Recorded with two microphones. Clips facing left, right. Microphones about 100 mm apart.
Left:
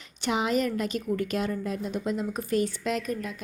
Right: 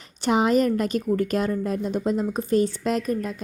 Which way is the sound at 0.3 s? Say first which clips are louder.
Right 6 dB; 45° right (ahead or behind).